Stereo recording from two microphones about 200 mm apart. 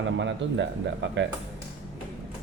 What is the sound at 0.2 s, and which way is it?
A man's voice, 65° right (ahead or behind).